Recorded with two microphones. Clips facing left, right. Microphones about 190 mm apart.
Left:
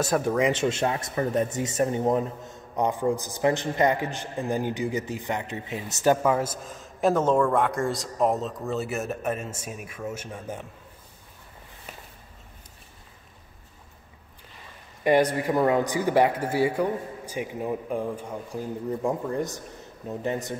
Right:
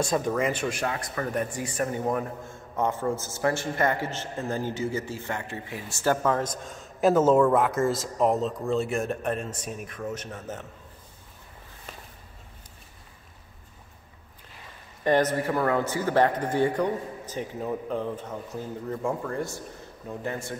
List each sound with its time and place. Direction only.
0.0 s a man's voice: 5° left (ahead or behind)
0.7 s a man's voice: 25° left (ahead or behind)
15.0 s a man's voice: 10° left (ahead or behind)